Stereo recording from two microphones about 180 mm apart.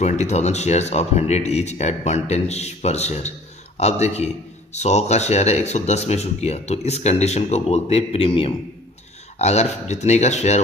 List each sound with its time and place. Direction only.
0.0 s speech: 40° left (ahead or behind)